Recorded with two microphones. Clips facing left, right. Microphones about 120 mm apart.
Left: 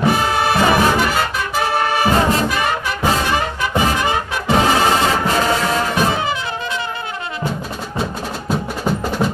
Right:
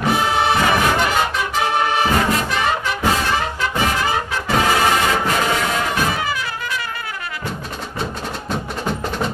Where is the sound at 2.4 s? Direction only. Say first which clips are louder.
Left 1 dB; 5° left (ahead or behind).